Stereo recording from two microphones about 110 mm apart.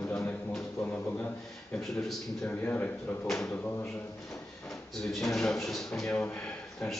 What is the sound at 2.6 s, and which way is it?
Speech, 20° left (ahead or behind).